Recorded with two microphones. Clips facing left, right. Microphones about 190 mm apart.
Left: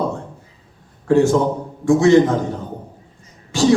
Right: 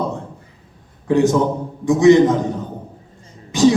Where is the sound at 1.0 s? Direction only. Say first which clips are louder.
Left 1 dB; 20° right (ahead or behind).